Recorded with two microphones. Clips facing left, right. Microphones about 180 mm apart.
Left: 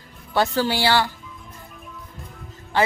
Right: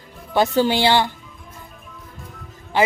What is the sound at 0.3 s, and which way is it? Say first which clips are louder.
Speech: right 4 dB; 20° right (ahead or behind).